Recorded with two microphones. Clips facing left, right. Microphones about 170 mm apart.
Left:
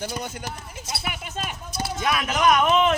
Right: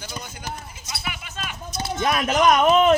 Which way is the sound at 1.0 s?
45° left (ahead or behind).